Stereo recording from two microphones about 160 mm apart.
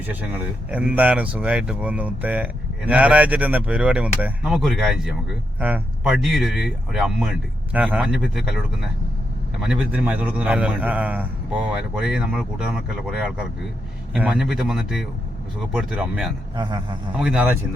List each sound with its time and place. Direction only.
0.0 s speech: 10° right (ahead or behind)
16.6 s a man's voice: 30° right (ahead or behind)
17.2 s speech: 5° right (ahead or behind)